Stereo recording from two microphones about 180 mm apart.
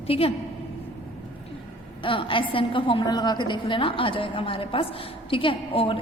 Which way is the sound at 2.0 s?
30° left (ahead or behind).